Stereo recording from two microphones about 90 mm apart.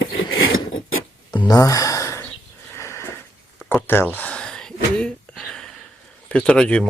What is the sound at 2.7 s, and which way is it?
Sniff, 30° left (ahead or behind).